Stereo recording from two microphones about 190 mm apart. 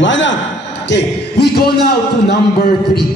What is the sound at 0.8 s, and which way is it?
A man's voice, 60° left (ahead or behind).